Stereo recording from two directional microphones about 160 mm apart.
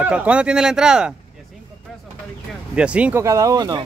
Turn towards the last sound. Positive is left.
turn(degrees=-25)  # may be behind; listen again after turning